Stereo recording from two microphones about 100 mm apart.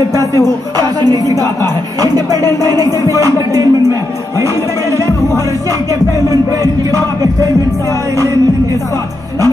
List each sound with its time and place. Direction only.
1.0 s music: 40° right (ahead or behind)
6.1 s music: 35° right (ahead or behind)